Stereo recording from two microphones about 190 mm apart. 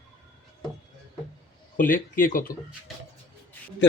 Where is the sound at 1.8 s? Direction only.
45° left (ahead or behind).